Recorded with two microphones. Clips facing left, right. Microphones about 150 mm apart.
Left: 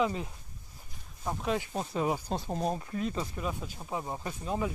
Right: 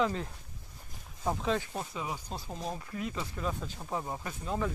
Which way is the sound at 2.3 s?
35° left (ahead or behind).